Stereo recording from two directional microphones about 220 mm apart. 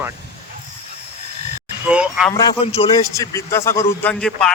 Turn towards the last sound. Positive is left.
turn(degrees=0)  # may be behind; listen again after turning